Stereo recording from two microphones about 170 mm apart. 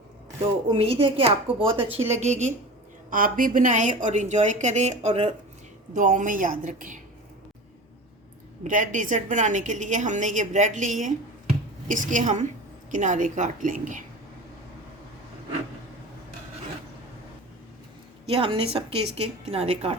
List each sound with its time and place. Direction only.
0.7 s a woman's voice: 35° right (ahead or behind)
3.1 s a woman's voice: 55° right (ahead or behind); by 5.3 s 40° right (ahead or behind)
5.9 s a woman's voice: 50° right (ahead or behind)
8.6 s a woman's voice: 50° right (ahead or behind)
18.3 s a woman's voice: 30° right (ahead or behind)